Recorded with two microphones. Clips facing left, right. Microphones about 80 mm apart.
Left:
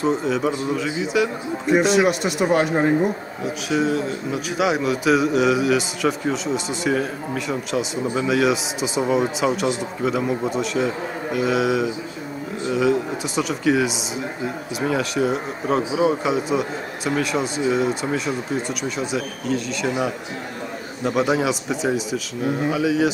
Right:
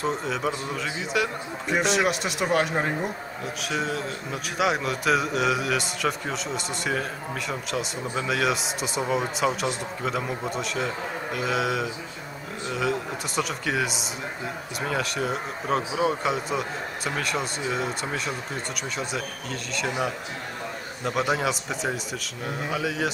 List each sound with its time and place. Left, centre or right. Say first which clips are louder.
0.0 s speech: left 6 dB; centre